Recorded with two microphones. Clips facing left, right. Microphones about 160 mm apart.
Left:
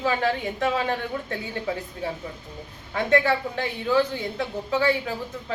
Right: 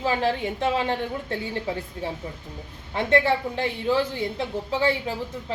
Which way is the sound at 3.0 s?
25° right (ahead or behind).